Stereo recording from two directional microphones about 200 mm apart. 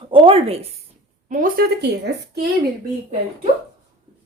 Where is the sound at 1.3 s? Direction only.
45° right (ahead or behind).